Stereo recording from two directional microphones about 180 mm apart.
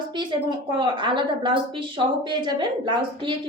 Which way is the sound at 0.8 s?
25° right (ahead or behind).